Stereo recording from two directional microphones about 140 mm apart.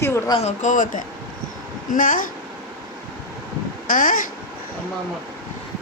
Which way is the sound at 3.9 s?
75° left (ahead or behind).